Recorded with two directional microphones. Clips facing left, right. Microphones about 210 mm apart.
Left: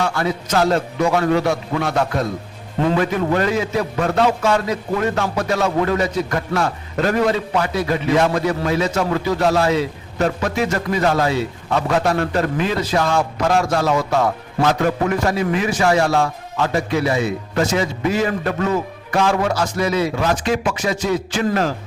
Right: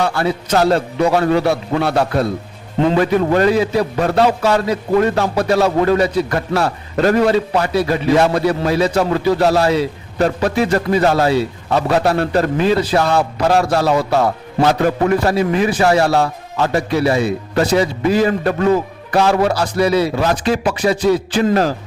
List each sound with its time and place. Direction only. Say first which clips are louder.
0.0 s a man's voice: right 3 dB; 35° right (ahead or behind)